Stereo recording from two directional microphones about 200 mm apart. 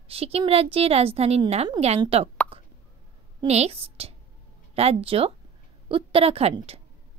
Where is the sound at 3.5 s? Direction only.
30° right (ahead or behind).